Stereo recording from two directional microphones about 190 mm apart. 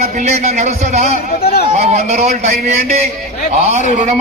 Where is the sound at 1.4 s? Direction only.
55° left (ahead or behind).